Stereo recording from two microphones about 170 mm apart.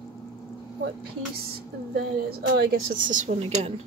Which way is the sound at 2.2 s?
70° right (ahead or behind).